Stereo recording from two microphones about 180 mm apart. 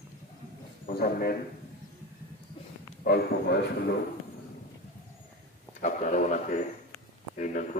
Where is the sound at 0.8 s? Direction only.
55° left (ahead or behind).